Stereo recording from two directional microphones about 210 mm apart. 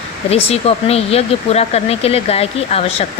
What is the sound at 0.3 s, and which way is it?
Speech, 30° left (ahead or behind).